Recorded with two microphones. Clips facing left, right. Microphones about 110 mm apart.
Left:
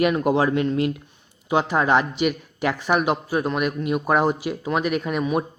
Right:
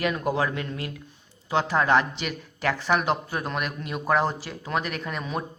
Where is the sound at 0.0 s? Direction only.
25° left (ahead or behind).